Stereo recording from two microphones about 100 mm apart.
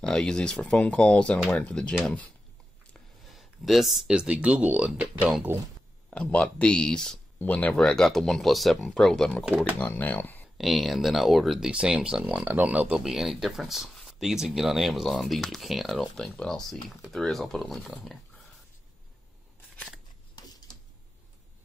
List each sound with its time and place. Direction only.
0.0 s speech: 5° left (ahead or behind)
3.3 s speech: centre (ahead or behind)
6.0 s speech: 10° left (ahead or behind)
7.7 s speech: 5° left (ahead or behind)
9.8 s speech: 15° left (ahead or behind)
10.6 s speech: centre (ahead or behind)
13.0 s speech: 5° right (ahead or behind)